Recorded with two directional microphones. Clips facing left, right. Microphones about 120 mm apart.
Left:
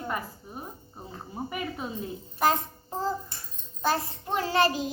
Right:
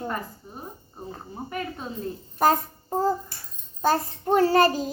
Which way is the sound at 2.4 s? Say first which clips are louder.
Right 4 dB; 45° right (ahead or behind).